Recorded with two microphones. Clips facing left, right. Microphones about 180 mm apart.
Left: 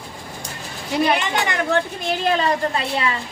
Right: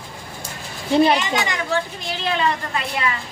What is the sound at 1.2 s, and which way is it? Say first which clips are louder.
Speech: left 1 dB; 55° left (ahead or behind).